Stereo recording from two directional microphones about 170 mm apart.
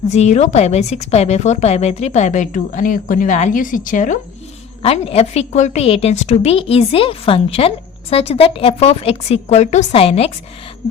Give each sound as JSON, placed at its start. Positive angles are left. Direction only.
{"t": 0.1, "sound": "a woman's voice", "side_deg": 40}
{"t": 4.8, "sound": "a woman's voice", "side_deg": 35}